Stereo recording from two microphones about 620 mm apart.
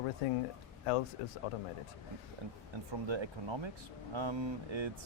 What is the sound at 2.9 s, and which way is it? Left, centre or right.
Speech, right.